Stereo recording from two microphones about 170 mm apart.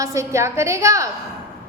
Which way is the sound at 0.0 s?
15° right (ahead or behind).